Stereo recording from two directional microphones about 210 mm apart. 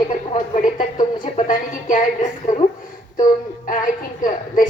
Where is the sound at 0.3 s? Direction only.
40° left (ahead or behind).